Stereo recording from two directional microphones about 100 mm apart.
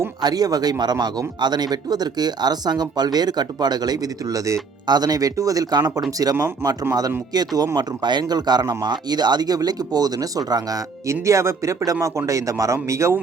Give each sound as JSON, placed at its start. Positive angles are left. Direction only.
{"t": 0.2, "sound": "a man's voice", "side_deg": -40}